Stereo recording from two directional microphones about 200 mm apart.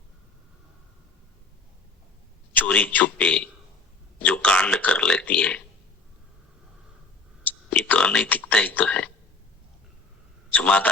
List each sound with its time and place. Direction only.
2.5 s speech: 5° left (ahead or behind)
7.4 s speech: 5° left (ahead or behind)
10.5 s speech: 5° left (ahead or behind)